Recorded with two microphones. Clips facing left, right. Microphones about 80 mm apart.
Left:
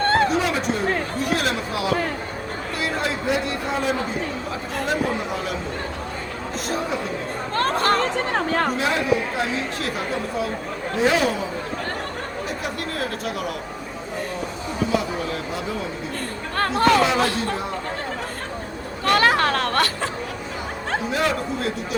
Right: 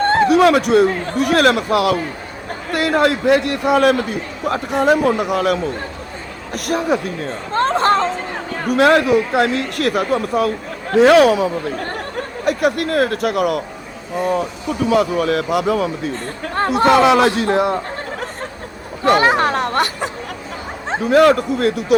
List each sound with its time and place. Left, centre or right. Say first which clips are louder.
0.3 s a man's voice: right 10 dB; right
7.5 s speech: right 5 dB; right
8.7 s a man's voice: right 9 dB; right
12.5 s speech: right 16 dB; right
14.8 s a man's voice: right 10 dB; right
16.6 s speech: right 5 dB; centre
17.0 s a man's voice: right 7 dB; right
19.0 s speech: right 4 dB; right
21.1 s speech: right 14 dB; right